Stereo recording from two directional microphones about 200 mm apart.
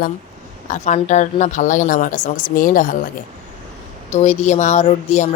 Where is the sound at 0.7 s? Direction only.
35° left (ahead or behind).